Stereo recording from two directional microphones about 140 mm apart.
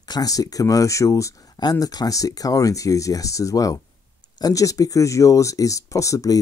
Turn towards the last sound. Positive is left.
turn(degrees=25)  # may be behind; listen again after turning